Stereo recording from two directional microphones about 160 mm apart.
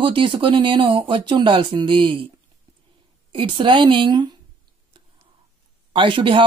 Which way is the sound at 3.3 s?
30° right (ahead or behind).